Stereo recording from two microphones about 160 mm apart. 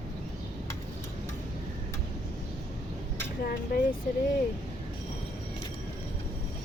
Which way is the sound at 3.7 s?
70° left (ahead or behind).